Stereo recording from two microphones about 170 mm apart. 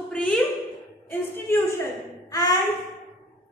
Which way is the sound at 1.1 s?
15° left (ahead or behind).